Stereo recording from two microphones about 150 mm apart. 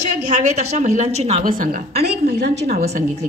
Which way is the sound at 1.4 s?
65° right (ahead or behind).